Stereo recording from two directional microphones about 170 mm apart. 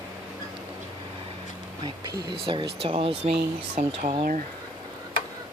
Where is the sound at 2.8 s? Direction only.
35° right (ahead or behind).